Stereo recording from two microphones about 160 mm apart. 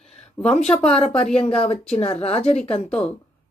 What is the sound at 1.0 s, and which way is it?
Speech, 35° left (ahead or behind).